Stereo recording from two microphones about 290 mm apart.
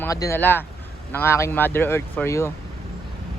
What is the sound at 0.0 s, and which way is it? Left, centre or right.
Speech, centre.